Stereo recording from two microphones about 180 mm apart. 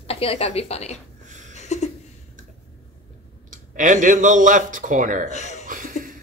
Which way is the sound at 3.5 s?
45° right (ahead or behind).